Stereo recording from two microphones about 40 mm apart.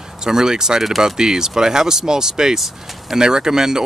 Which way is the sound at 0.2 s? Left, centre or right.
Centre.